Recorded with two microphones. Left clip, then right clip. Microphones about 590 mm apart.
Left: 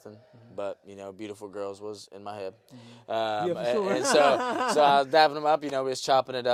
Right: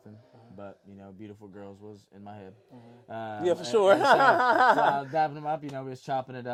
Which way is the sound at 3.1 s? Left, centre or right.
Left.